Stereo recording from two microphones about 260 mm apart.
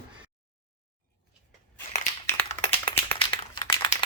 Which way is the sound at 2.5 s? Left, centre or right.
Left.